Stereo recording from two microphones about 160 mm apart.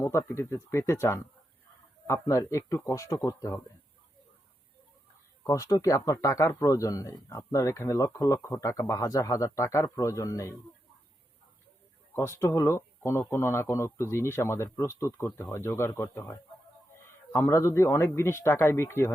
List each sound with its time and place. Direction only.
0.0 s speech: 15° left (ahead or behind)
5.4 s a man's voice: 20° left (ahead or behind)
12.1 s speech: 15° left (ahead or behind)